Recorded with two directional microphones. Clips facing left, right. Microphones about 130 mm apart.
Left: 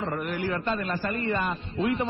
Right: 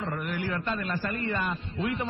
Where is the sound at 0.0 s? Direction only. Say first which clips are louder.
Left 3 dB; 30° left (ahead or behind).